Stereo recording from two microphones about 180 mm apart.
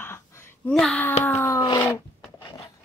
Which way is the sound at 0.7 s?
5° left (ahead or behind).